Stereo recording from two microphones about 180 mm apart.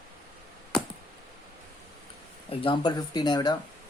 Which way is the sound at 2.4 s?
30° left (ahead or behind).